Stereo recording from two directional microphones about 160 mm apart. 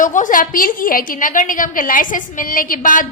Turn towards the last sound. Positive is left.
turn(degrees=55)  # may be behind; listen again after turning